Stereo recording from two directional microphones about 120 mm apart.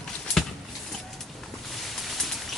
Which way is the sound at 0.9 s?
Centre (ahead or behind).